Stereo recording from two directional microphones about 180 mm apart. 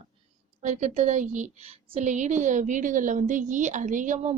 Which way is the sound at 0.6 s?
40° right (ahead or behind).